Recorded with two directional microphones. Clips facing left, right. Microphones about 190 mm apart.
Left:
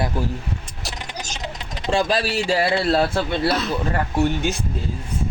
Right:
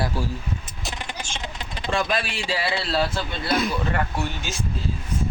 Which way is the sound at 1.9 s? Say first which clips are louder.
Left 5 dB; 30° left (ahead or behind).